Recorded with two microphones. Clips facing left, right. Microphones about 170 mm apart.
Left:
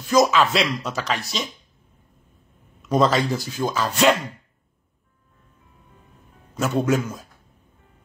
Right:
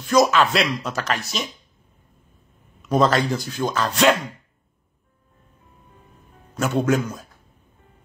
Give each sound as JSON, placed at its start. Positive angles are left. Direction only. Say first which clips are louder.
{"t": 0.0, "sound": "speech", "louder": "even", "side_deg": 0}
{"t": 2.9, "sound": "speech", "louder": "even", "side_deg": 0}
{"t": 6.5, "sound": "speech", "louder": "right 1 dB", "side_deg": 0}